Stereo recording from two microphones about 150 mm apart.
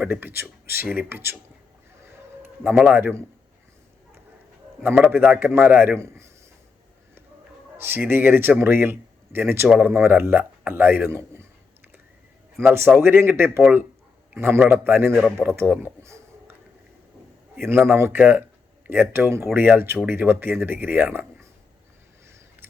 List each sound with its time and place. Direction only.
0.0 s speech: 15° right (ahead or behind)
2.0 s a sound: 15° right (ahead or behind)
2.7 s speech: 10° right (ahead or behind)
4.8 s speech: 15° right (ahead or behind)
7.8 s speech: 15° right (ahead or behind)
12.5 s speech: 15° right (ahead or behind)
17.6 s speech: 15° right (ahead or behind)